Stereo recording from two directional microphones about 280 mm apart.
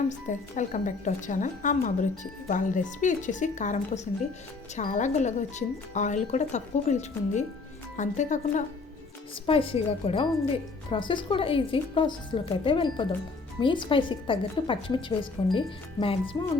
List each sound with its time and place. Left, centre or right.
0.1 s a woman's voice: left